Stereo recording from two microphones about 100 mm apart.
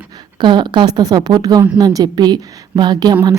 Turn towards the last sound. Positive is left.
turn(degrees=-45)  # may be behind; listen again after turning